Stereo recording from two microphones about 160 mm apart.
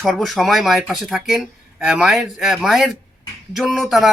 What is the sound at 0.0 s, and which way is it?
Speech, centre (ahead or behind).